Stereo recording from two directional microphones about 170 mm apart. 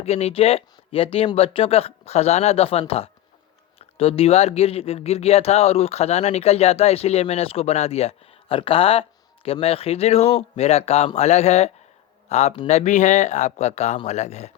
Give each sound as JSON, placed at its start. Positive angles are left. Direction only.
{"t": 0.0, "sound": "speech", "side_deg": 40}